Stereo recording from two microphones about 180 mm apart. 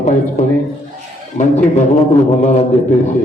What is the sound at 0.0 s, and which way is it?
Speech, 40° left (ahead or behind).